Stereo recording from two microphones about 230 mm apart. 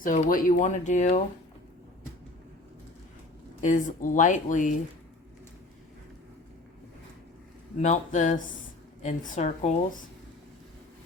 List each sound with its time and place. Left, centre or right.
0.0 s speech: left
3.6 s speech: left
7.8 s speech: left